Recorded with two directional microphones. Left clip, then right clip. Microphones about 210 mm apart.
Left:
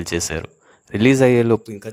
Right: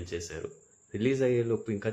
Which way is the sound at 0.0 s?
50° left (ahead or behind).